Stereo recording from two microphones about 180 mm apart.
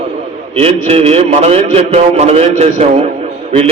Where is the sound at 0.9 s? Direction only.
35° right (ahead or behind).